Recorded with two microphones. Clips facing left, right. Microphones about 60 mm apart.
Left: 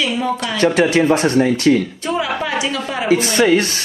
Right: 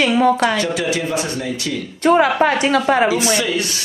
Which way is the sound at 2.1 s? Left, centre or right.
Right.